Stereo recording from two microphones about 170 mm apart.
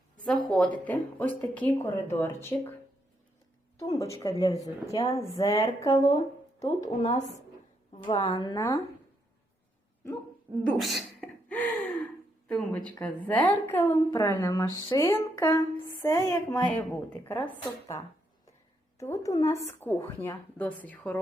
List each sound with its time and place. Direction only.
0.3 s a woman's voice: 5° left (ahead or behind)
3.8 s a woman's voice: 20° left (ahead or behind)
5.9 s a woman's voice: 35° left (ahead or behind)
8.0 s a woman's voice: 20° left (ahead or behind)
10.6 s gasp: centre (ahead or behind)
12.5 s a woman's voice: 5° left (ahead or behind)